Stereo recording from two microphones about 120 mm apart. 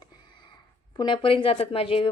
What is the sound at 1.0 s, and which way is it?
Speech, 45° left (ahead or behind).